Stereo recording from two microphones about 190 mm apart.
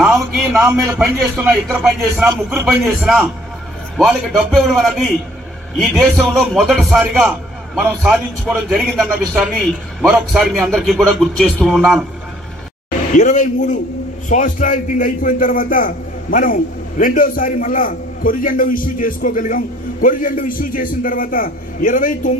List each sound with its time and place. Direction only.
0.0 s a sound: centre (ahead or behind)
0.7 s a man's voice: 10° right (ahead or behind)
13.1 s a man's voice: 40° left (ahead or behind)